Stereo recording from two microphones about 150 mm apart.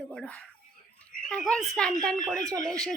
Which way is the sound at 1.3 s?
5° left (ahead or behind).